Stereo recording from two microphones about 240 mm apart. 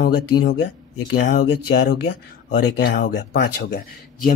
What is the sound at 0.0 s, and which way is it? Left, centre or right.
Speech, left.